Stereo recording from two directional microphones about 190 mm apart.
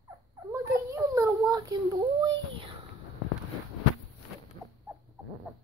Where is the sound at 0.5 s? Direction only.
15° right (ahead or behind).